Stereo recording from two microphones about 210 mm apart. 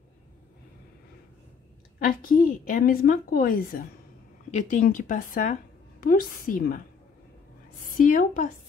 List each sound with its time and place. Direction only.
2.0 s a woman's voice: 40° left (ahead or behind)
8.0 s speech: 40° left (ahead or behind)